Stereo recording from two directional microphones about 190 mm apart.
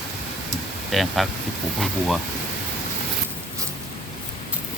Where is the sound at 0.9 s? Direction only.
Centre (ahead or behind).